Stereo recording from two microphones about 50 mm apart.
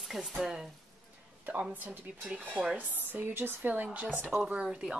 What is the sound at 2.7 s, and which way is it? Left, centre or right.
Speech, right.